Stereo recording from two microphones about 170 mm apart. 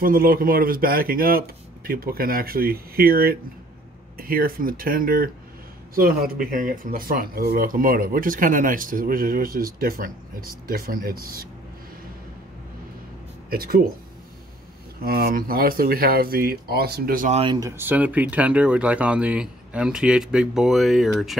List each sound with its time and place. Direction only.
0.0 s speech: 55° right (ahead or behind)
13.5 s speech: 60° right (ahead or behind)
15.0 s speech: 60° right (ahead or behind)
17.6 s speech: 15° right (ahead or behind)